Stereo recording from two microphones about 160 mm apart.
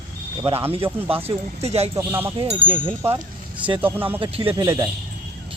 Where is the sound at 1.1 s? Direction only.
40° right (ahead or behind).